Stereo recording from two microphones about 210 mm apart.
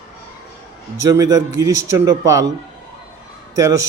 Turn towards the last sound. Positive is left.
turn(degrees=-15)  # may be behind; listen again after turning